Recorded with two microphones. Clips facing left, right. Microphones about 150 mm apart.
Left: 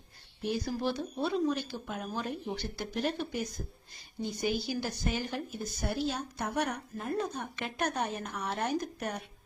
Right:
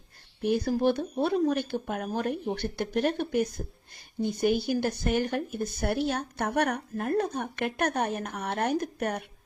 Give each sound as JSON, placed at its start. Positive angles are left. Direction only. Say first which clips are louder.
{"t": 0.4, "sound": "speech", "louder": "right 7 dB", "side_deg": -55}